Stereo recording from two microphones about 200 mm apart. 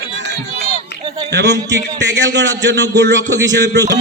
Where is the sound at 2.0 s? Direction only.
65° right (ahead or behind).